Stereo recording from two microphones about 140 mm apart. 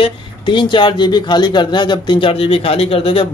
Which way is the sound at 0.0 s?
35° left (ahead or behind).